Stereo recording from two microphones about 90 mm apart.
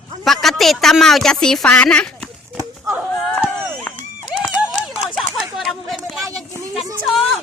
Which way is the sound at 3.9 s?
20° left (ahead or behind).